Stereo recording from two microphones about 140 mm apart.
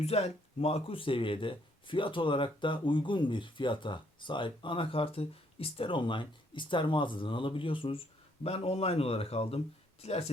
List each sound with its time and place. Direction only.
0.0 s speech: 50° left (ahead or behind)